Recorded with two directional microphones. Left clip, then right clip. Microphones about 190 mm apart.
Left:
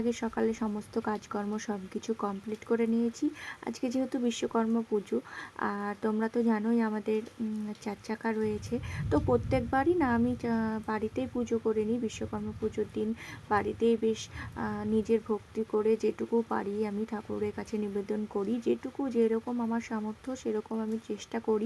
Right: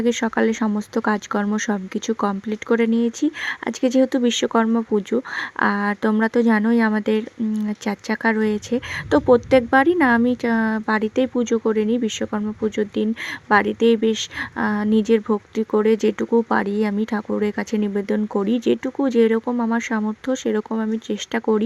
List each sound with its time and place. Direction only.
0.0 s speech: 20° right (ahead or behind)